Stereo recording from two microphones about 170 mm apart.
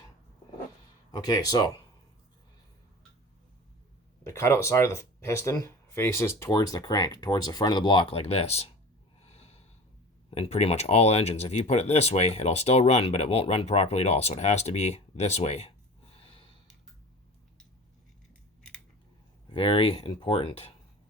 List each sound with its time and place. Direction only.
1.1 s speech: 25° left (ahead or behind)
4.2 s speech: 15° left (ahead or behind); by 8.7 s 40° left (ahead or behind)
9.2 s snort: 40° left (ahead or behind)
10.2 s speech: 35° left (ahead or behind)
19.5 s speech: 30° left (ahead or behind)